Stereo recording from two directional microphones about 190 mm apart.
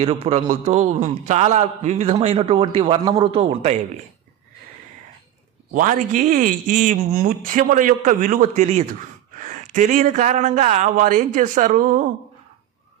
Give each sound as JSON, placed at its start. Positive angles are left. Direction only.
{"t": 0.0, "sound": "speech", "side_deg": -35}
{"t": 5.7, "sound": "speech", "side_deg": -45}